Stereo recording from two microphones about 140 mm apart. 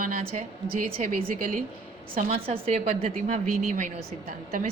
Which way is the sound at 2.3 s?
50° right (ahead or behind).